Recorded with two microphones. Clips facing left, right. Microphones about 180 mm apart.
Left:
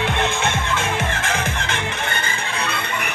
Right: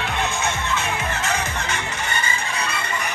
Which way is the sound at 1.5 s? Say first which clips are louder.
Left 2 dB; 75° left (ahead or behind).